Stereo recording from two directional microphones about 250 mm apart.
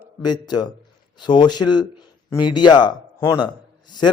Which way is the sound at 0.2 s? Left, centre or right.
Centre.